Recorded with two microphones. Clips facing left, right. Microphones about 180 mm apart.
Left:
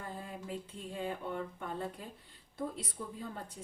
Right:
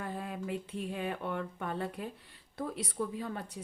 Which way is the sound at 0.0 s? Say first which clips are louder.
Right 5 dB; 70° right (ahead or behind).